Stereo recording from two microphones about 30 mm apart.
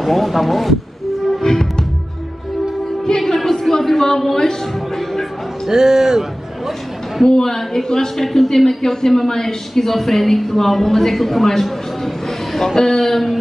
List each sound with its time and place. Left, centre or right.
0.0 s speech: centre
1.4 s music: centre
3.2 s speech: centre
5.7 s a man's voice: centre
7.2 s speech: centre